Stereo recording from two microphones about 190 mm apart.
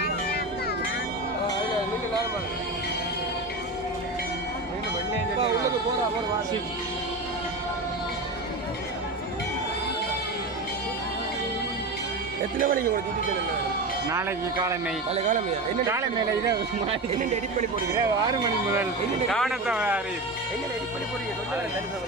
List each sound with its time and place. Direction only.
12.5 s speech: 45° right (ahead or behind)
14.1 s speech: 15° right (ahead or behind)
15.1 s speech: 40° right (ahead or behind)
15.9 s speech: 15° right (ahead or behind)
16.8 s speech: 35° right (ahead or behind)
18.4 s speech: 15° right (ahead or behind)
19.2 s speech: centre (ahead or behind)